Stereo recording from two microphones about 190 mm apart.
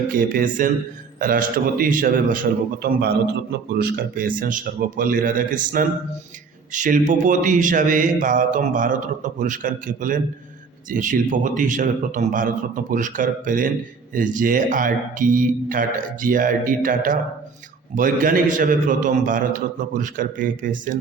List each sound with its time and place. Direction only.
0.1 s speech: 45° right (ahead or behind)